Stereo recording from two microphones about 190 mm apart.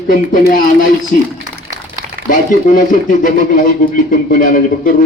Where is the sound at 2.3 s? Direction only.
45° left (ahead or behind).